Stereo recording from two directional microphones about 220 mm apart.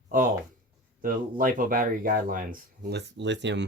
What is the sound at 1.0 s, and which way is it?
Speech, 40° right (ahead or behind).